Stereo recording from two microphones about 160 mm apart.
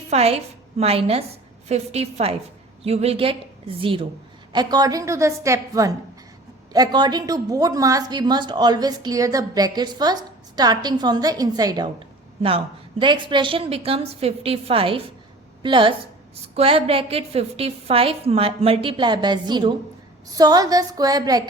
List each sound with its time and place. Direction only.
0.1 s a woman's voice: 40° right (ahead or behind); by 21.4 s 25° right (ahead or behind)